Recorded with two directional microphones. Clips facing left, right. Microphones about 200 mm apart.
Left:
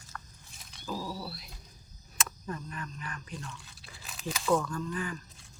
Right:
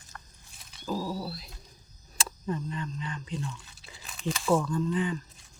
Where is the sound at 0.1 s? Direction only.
25° right (ahead or behind).